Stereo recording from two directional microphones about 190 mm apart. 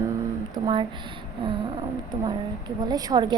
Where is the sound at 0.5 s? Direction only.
25° right (ahead or behind).